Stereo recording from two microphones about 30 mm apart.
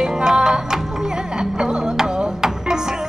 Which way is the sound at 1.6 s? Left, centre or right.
Right.